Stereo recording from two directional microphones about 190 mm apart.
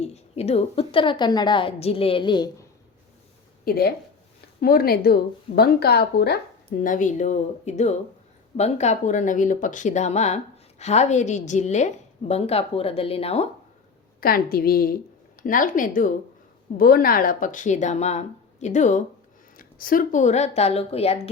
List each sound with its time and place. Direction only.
0.0 s a woman's voice: 35° left (ahead or behind)
3.6 s speech: 50° left (ahead or behind); by 13.5 s 30° left (ahead or behind)
14.2 s speech: 50° left (ahead or behind); by 21.2 s 30° left (ahead or behind)